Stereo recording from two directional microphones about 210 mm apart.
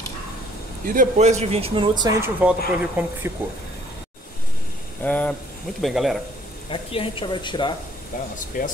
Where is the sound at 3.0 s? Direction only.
10° right (ahead or behind).